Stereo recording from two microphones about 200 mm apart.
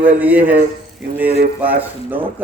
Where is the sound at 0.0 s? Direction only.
10° right (ahead or behind).